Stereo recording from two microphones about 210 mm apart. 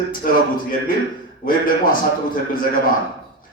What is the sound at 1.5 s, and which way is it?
Speech, 40° left (ahead or behind).